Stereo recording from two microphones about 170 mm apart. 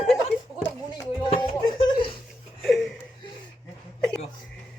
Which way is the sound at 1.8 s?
30° left (ahead or behind).